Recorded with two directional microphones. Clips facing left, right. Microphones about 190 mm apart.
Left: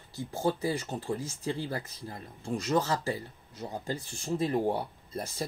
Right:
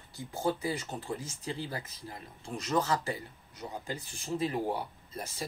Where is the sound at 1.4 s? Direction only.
35° left (ahead or behind).